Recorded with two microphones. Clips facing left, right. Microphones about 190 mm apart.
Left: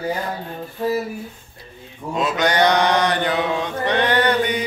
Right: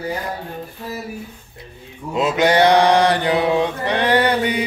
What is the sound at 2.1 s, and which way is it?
Mantra, 25° right (ahead or behind).